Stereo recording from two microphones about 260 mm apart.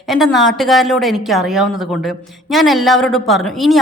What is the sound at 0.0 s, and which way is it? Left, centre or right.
A woman's voice, centre.